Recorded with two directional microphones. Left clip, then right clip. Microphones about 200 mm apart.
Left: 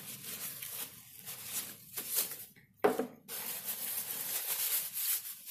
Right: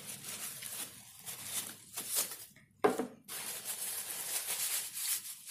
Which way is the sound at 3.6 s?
10° right (ahead or behind).